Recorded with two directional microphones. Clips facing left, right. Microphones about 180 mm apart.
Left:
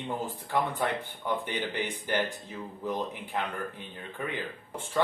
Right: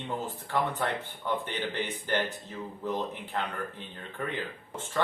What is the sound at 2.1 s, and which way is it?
Speech, 15° left (ahead or behind).